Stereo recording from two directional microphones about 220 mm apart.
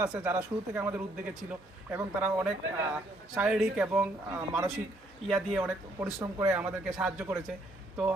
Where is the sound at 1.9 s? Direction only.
5° right (ahead or behind).